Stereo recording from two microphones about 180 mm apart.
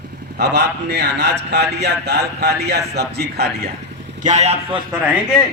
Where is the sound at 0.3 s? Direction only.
65° right (ahead or behind).